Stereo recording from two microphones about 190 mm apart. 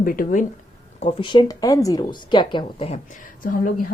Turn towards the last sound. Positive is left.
turn(degrees=45)  # may be behind; listen again after turning